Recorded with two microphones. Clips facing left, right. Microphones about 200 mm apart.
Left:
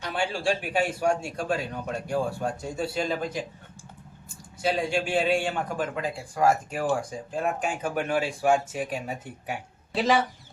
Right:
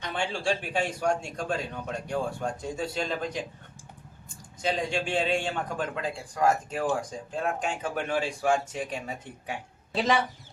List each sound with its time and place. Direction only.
0.0 s a man's voice: 5° left (ahead or behind)
4.6 s a man's voice: 5° left (ahead or behind)